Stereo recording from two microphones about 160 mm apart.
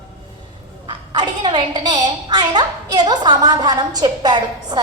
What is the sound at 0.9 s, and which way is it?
A woman's voice, 25° right (ahead or behind).